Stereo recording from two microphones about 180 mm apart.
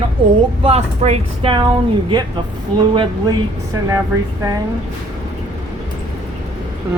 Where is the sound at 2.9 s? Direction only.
30° right (ahead or behind).